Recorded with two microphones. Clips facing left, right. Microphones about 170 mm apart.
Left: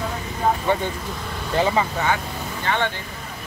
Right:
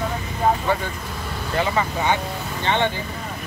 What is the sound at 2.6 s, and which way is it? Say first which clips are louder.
Speech: right 2 dB; 20° right (ahead or behind).